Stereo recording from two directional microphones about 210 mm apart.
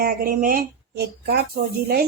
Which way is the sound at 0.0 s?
40° right (ahead or behind).